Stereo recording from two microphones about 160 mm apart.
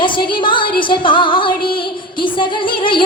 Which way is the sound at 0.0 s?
30° left (ahead or behind).